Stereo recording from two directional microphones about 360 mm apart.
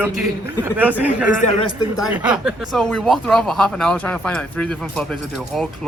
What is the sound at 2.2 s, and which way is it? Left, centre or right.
Speech, centre.